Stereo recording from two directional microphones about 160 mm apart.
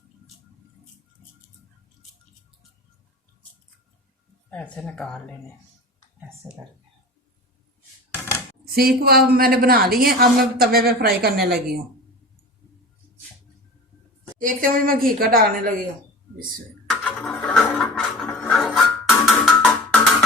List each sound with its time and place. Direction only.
4.5 s speech: 10° left (ahead or behind)
6.4 s speech: 25° right (ahead or behind)
9.0 s a woman's voice: 75° right (ahead or behind)
14.3 s a woman's voice: 60° right (ahead or behind)
16.8 s music: 5° left (ahead or behind)